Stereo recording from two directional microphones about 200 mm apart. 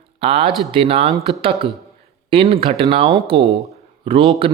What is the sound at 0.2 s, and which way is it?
Speech, 30° right (ahead or behind).